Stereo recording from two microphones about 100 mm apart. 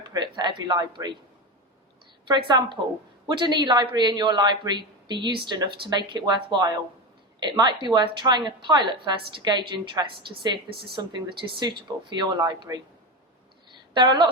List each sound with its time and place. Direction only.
0.1 s a woman's voice: 50° right (ahead or behind)
2.2 s a woman's voice: 50° right (ahead or behind)
13.9 s a woman's voice: 50° right (ahead or behind)